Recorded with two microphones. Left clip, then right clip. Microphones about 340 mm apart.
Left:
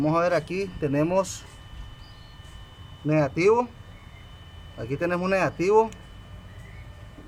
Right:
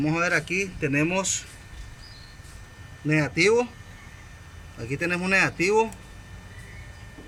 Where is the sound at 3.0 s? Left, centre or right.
Left.